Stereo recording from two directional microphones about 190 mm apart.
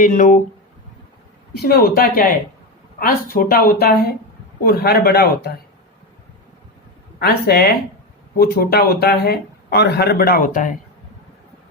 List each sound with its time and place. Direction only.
0.0 s speech: 40° left (ahead or behind)
1.5 s speech: 55° left (ahead or behind)
7.2 s speech: 55° left (ahead or behind)